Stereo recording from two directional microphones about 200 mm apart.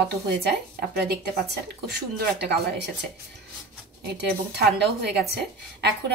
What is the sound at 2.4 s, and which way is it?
Speech, 60° right (ahead or behind).